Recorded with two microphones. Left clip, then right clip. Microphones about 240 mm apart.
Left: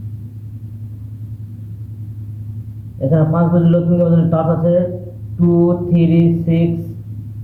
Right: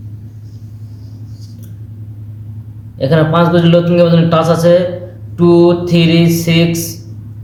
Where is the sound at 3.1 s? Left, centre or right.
Right.